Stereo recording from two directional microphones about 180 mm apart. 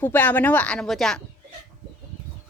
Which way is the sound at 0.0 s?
10° left (ahead or behind).